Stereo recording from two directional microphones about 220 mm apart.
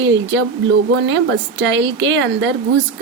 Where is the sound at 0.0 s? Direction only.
55° right (ahead or behind).